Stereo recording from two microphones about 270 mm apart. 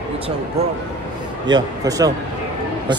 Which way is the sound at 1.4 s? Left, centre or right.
Centre.